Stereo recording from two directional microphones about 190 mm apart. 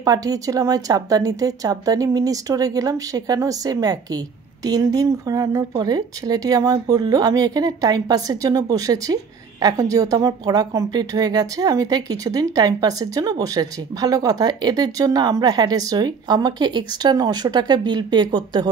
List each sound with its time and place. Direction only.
0.0 s speech: 20° right (ahead or behind)